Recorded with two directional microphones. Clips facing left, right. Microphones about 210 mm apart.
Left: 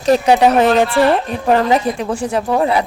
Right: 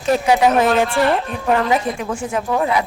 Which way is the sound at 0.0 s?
35° left (ahead or behind).